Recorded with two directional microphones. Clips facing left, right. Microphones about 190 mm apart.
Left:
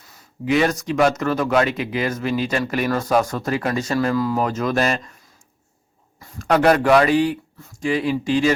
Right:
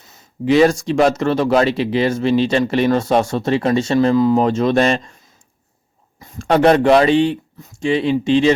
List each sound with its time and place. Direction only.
0.0 s speech: 25° right (ahead or behind)
6.1 s speech: 25° right (ahead or behind)